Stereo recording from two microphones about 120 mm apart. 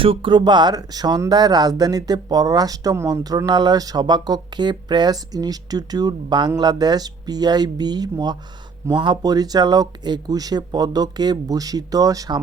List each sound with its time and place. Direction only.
0.0 s speech: 45° right (ahead or behind); by 12.4 s 30° right (ahead or behind)